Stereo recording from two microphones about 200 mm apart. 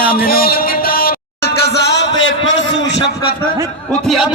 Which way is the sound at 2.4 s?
65° left (ahead or behind).